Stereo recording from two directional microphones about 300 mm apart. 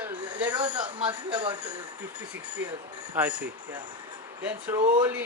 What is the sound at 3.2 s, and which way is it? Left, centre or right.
Speech, centre.